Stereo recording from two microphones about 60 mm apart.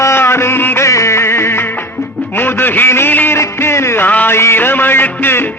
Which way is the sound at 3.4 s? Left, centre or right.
Left.